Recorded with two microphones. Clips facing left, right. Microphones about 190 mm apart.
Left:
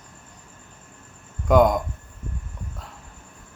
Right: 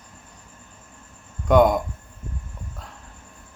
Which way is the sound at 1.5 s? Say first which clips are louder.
Right 1 dB; centre (ahead or behind).